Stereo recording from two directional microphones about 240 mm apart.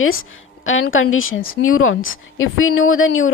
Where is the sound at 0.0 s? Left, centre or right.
Left.